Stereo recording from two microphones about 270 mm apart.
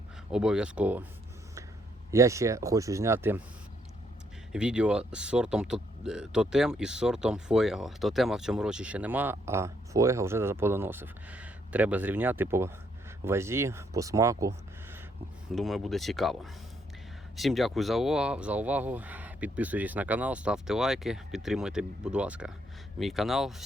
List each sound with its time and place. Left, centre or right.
0.3 s speech: centre
2.0 s speech: centre
4.5 s speech: centre
15.5 s speech: centre